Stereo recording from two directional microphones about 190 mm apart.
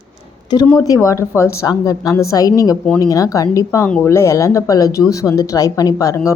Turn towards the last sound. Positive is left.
turn(degrees=15)  # may be behind; listen again after turning